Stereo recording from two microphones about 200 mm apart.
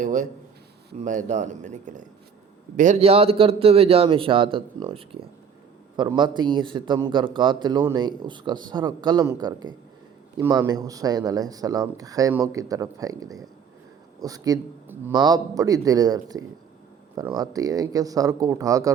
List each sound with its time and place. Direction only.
0.0 s a man's voice: 40° right (ahead or behind); by 18.9 s 15° right (ahead or behind)